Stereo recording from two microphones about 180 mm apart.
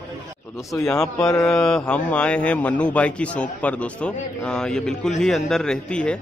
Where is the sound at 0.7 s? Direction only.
20° left (ahead or behind).